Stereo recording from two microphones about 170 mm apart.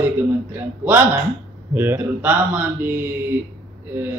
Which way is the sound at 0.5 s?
10° right (ahead or behind).